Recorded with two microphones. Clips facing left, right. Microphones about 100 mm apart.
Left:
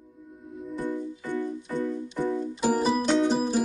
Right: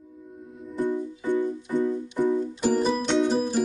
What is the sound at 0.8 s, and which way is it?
Music, 15° right (ahead or behind).